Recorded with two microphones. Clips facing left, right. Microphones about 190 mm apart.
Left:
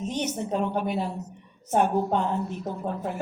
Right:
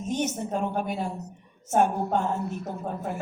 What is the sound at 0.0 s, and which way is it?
Speech, 50° right (ahead or behind).